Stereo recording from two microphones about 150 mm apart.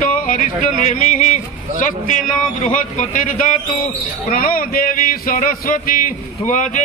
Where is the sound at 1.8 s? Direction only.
60° left (ahead or behind).